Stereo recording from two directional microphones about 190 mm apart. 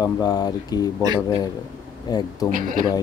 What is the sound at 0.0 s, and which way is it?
Speech, 20° left (ahead or behind).